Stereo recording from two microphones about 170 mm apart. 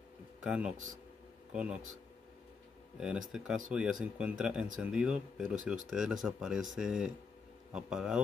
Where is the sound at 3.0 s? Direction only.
5° right (ahead or behind).